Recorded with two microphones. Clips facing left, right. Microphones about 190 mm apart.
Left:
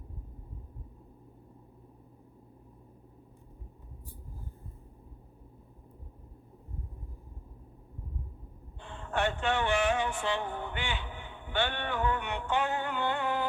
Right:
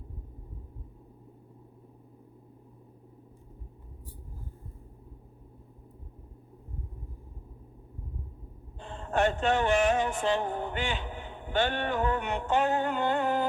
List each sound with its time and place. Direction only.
8.8 s music: 40° right (ahead or behind)